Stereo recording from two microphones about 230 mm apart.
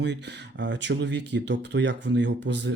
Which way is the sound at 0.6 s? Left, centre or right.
Right.